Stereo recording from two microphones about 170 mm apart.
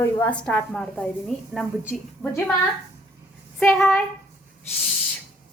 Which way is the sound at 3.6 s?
5° left (ahead or behind).